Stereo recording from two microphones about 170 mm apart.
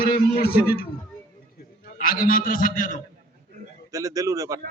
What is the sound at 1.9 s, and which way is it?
A man's voice, 55° left (ahead or behind).